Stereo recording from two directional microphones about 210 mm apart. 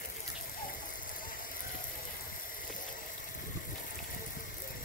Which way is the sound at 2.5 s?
40° left (ahead or behind).